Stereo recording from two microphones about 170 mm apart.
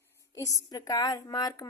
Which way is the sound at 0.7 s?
20° left (ahead or behind).